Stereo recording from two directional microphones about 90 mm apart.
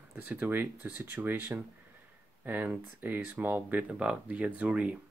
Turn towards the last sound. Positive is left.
turn(degrees=-15)  # may be behind; listen again after turning